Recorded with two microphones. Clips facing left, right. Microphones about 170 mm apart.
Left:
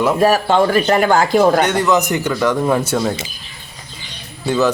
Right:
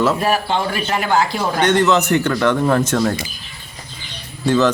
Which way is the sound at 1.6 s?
10° left (ahead or behind).